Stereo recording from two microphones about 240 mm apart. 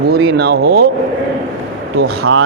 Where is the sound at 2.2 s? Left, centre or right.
Right.